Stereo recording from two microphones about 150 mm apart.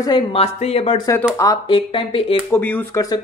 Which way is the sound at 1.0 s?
20° left (ahead or behind).